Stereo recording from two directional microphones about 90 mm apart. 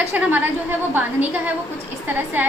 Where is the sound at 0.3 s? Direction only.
20° right (ahead or behind).